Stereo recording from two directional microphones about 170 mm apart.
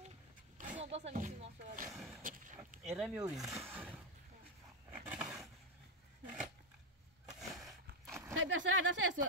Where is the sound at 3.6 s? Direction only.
10° right (ahead or behind).